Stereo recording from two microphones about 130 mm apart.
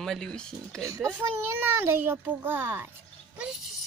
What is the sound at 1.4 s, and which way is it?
A child's voice, 20° right (ahead or behind).